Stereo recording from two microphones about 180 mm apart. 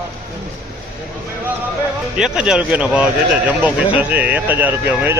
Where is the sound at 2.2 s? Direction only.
5° right (ahead or behind).